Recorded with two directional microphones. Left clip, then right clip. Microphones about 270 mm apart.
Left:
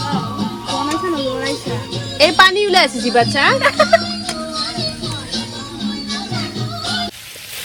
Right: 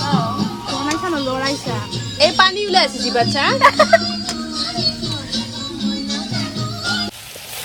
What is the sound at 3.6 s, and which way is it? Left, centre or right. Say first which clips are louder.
Speech: right 2 dB; right.